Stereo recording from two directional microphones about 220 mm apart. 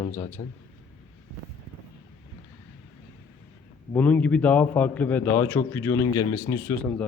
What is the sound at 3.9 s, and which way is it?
A man's voice, 5° left (ahead or behind).